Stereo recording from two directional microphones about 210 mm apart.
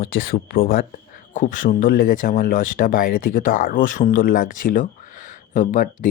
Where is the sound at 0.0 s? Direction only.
45° left (ahead or behind).